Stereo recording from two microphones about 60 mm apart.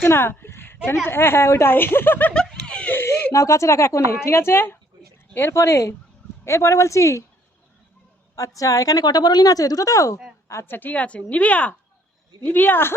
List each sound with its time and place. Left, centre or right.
0.0 s a woman's voice: left
2.3 s speech: centre
3.3 s speech: left
5.5 s a woman's voice: left
8.4 s a woman's voice: left
10.5 s speech: left
10.8 s a woman's voice: left